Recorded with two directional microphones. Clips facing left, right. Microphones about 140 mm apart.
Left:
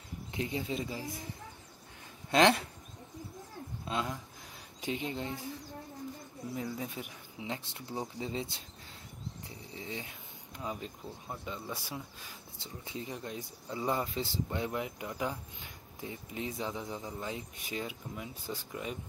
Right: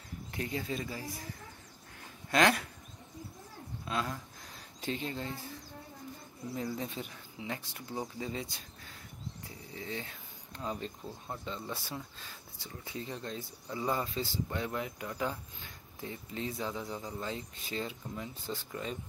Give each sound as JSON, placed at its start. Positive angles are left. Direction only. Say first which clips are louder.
{"t": 0.3, "sound": "speech", "louder": "left 1 dB", "side_deg": 20}
{"t": 2.3, "sound": "speech", "louder": "left 2 dB", "side_deg": 25}
{"t": 3.8, "sound": "speech", "louder": "even", "side_deg": 20}
{"t": 6.5, "sound": "speech", "louder": "right 1 dB", "side_deg": 10}
{"t": 9.8, "sound": "speech", "louder": "right 2 dB", "side_deg": 20}